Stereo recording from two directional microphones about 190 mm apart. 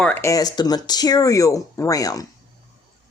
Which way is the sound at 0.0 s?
10° left (ahead or behind).